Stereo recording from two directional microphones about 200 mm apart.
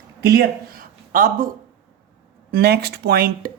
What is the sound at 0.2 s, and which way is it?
Speech, 55° right (ahead or behind).